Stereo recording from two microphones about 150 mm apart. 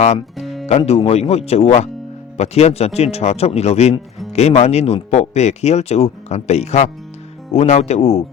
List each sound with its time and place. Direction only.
0.3 s music: centre (ahead or behind)
0.9 s speech: 45° left (ahead or behind)